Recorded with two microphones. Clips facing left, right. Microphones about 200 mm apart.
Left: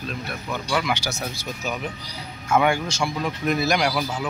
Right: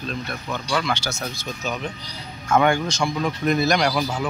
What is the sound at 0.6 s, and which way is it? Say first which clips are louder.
Speech: even; 10° left (ahead or behind).